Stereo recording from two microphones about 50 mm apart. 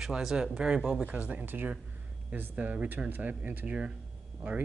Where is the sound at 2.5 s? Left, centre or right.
Right.